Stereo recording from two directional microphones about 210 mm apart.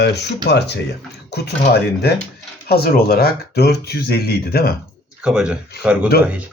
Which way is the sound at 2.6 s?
50° left (ahead or behind).